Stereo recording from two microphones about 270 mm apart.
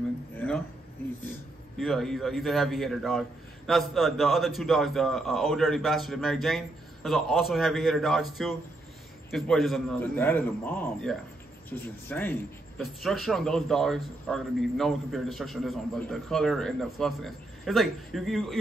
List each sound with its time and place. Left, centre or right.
1.8 s a man's voice: centre